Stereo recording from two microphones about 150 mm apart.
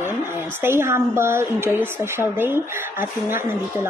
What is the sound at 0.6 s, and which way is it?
A woman's voice, 15° right (ahead or behind).